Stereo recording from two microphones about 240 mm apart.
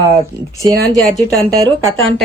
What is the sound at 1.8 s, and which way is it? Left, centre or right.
Speech, right.